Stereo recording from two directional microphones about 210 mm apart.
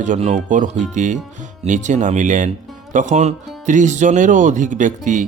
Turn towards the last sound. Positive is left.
turn(degrees=-35)  # may be behind; listen again after turning